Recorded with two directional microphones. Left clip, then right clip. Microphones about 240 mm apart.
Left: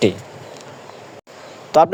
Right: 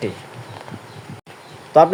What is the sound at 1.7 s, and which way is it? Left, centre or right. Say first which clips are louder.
Speech: right 1 dB; left.